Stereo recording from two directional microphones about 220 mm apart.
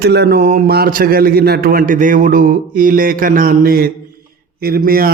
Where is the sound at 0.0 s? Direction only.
50° right (ahead or behind).